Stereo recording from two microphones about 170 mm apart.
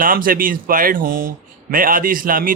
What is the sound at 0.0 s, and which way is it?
A man's voice, 55° right (ahead or behind).